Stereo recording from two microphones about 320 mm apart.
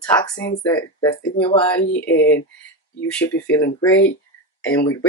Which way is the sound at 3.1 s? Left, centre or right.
Centre.